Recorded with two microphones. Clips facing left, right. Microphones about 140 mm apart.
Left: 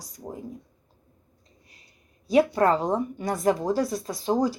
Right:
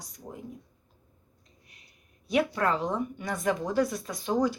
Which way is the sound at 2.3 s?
35° left (ahead or behind).